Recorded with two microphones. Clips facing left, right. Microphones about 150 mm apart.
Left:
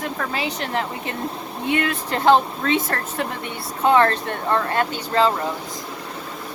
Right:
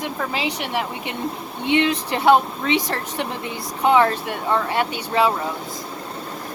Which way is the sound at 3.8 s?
15° right (ahead or behind).